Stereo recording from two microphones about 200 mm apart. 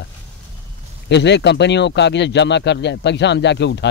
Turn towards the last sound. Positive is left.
turn(degrees=60)  # may be behind; listen again after turning